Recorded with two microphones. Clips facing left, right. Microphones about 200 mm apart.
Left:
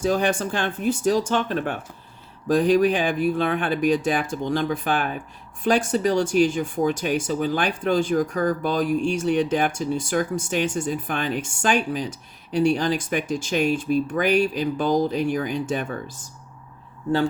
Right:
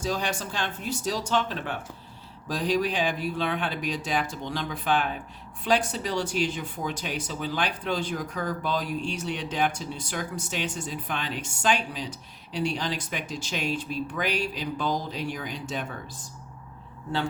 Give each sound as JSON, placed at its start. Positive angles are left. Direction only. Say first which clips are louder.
{"t": 0.0, "sound": "speech", "louder": "left 8 dB", "side_deg": 55}